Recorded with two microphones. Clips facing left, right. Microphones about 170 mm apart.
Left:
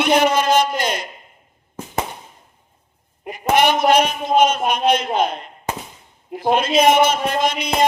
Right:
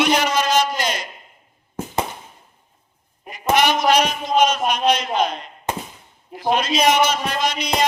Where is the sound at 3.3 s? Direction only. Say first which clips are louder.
Left 2 dB; 55° left (ahead or behind).